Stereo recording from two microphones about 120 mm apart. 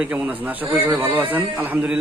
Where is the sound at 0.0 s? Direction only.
10° right (ahead or behind).